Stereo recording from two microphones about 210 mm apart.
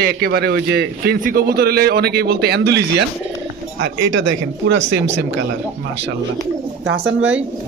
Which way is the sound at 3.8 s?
60° right (ahead or behind).